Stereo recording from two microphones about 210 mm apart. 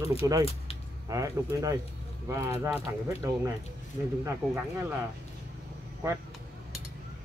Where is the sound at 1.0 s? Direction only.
15° right (ahead or behind).